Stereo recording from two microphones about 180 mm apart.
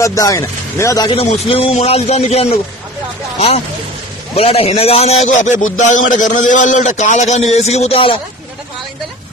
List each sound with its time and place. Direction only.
0.0 s speech: 20° left (ahead or behind)
1.2 s a man's voice: 35° left (ahead or behind)